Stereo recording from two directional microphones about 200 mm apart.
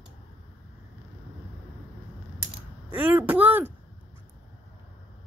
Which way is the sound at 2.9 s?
10° right (ahead or behind).